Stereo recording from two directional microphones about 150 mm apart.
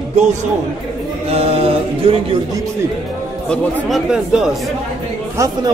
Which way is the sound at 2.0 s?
40° right (ahead or behind).